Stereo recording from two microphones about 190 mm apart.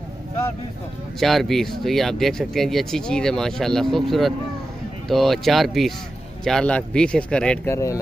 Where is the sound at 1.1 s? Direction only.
Centre (ahead or behind).